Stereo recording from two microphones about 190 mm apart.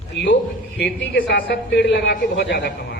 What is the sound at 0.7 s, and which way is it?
A man's voice, 60° left (ahead or behind).